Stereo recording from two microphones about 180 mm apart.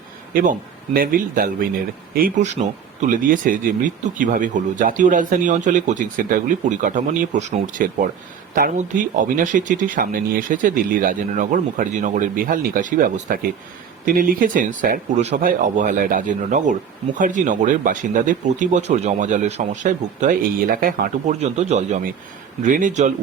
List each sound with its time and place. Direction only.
0.9 s speech: 50° right (ahead or behind)